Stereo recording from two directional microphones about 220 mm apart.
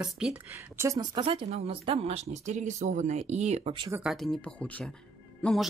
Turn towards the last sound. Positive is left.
turn(degrees=0)  # may be behind; listen again after turning